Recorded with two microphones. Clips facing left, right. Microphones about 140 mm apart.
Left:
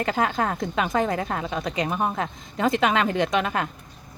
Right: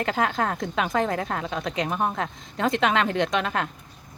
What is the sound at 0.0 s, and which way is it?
A woman's voice, centre (ahead or behind).